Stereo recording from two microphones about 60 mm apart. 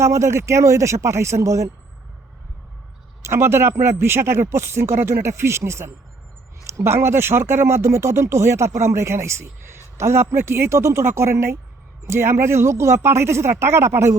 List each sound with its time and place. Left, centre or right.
0.0 s speech: right
3.2 s speech: right